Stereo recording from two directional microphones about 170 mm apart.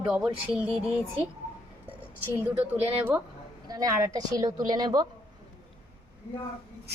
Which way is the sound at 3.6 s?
20° right (ahead or behind).